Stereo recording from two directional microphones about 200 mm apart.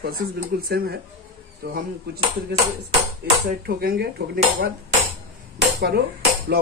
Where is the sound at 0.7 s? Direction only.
50° right (ahead or behind).